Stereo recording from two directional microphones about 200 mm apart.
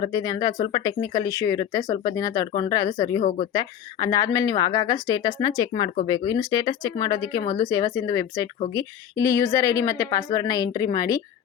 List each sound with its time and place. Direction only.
0.0 s a woman's voice: 20° left (ahead or behind)